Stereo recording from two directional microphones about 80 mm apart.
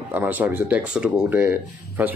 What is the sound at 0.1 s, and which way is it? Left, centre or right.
Speech, right.